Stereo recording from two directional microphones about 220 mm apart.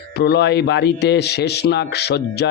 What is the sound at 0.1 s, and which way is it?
A man's voice, 50° left (ahead or behind).